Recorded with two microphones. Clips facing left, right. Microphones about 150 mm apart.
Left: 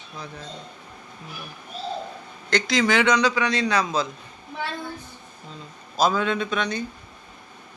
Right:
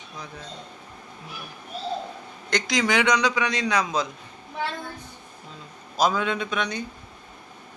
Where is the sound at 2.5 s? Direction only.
15° right (ahead or behind).